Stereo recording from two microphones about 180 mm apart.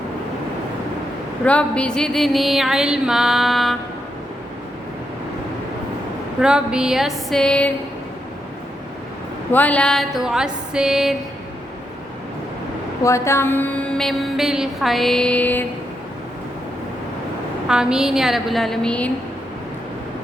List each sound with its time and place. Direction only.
1.5 s music: 5° left (ahead or behind)
6.4 s music: 5° right (ahead or behind)
9.5 s music: 10° left (ahead or behind)
13.0 s mantra: 15° left (ahead or behind)
17.7 s music: 5° right (ahead or behind)